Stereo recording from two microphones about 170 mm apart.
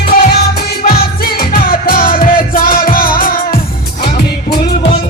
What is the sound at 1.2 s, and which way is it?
Music, 60° left (ahead or behind).